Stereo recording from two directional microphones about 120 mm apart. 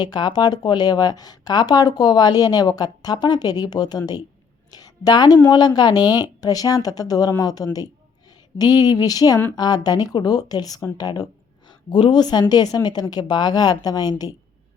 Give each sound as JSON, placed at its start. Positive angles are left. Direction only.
{"t": 0.0, "sound": "speech", "side_deg": 35}
{"t": 4.7, "sound": "a sound", "side_deg": 35}
{"t": 5.5, "sound": "speech", "side_deg": 35}